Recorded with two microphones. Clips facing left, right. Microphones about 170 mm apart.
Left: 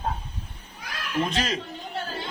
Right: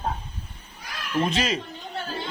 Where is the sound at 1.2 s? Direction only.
Centre (ahead or behind).